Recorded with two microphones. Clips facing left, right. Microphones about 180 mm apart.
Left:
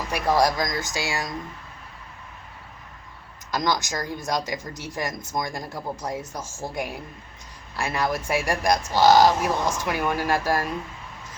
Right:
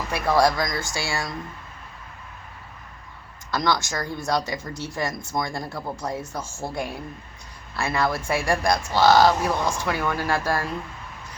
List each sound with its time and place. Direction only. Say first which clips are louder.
0.1 s speech: right 1 dB; 15° left (ahead or behind)
3.5 s speech: right 1 dB; 15° left (ahead or behind)